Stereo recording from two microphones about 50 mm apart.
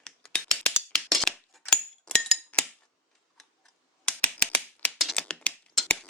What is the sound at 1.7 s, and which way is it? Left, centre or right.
Chink, centre.